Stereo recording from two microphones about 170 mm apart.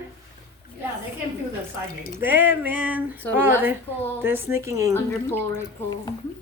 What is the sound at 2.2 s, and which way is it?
Speech, 10° right (ahead or behind).